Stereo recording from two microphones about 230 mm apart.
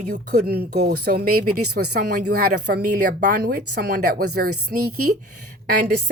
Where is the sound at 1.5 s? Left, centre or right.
Right.